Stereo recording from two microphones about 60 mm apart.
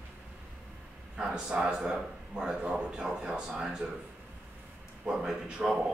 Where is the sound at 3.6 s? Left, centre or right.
Centre.